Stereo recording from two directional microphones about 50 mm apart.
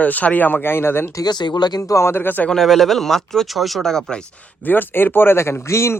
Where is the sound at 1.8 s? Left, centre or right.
Left.